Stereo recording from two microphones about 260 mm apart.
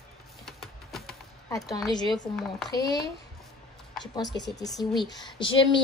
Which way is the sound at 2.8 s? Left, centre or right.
Left.